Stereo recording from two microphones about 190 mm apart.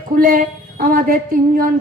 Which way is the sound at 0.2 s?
45° right (ahead or behind).